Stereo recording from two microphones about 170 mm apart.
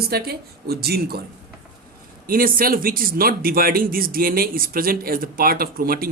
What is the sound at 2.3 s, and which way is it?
A man's voice, 55° right (ahead or behind).